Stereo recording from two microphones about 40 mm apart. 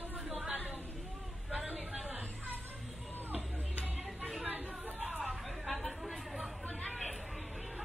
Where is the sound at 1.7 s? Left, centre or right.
Right.